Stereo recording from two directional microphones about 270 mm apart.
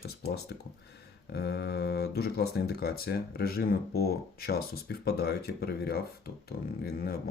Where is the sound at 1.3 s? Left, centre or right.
Left.